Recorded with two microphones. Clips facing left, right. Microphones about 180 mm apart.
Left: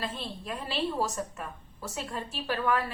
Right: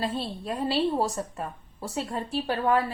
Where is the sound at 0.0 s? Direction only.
35° right (ahead or behind).